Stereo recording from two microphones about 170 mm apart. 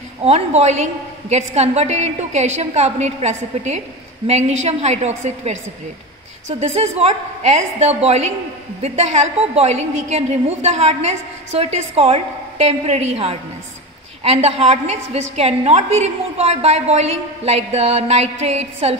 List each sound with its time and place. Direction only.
0.2 s a woman's voice: 40° right (ahead or behind)
6.6 s a woman's voice: 40° right (ahead or behind)